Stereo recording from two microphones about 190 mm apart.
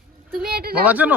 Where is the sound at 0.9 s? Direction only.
10° right (ahead or behind).